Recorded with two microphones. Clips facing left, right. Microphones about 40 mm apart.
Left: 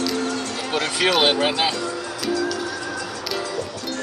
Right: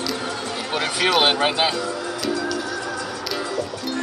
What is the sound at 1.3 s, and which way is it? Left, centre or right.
Speech, centre.